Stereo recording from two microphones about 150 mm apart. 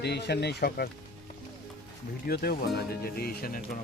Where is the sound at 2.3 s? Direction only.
90° left.